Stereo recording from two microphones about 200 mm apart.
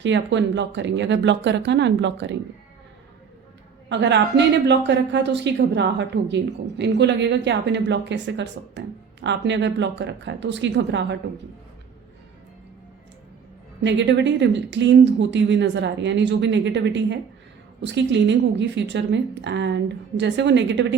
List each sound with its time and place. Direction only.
0.0 s speech: 65° right (ahead or behind)
3.8 s speech: 60° right (ahead or behind)
13.8 s speech: 60° right (ahead or behind)